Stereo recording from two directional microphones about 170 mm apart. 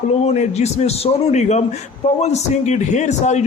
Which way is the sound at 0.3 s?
40° left (ahead or behind).